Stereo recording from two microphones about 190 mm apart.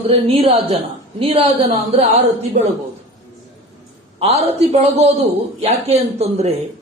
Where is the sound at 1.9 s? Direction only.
35° right (ahead or behind).